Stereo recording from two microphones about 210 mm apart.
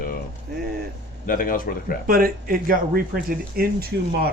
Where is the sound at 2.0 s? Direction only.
45° right (ahead or behind).